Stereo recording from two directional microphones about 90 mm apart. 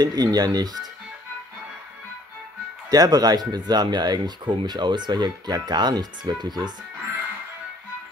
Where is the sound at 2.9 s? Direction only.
45° right (ahead or behind).